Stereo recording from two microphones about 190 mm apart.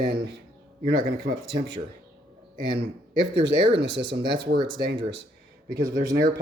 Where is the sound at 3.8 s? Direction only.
65° right (ahead or behind).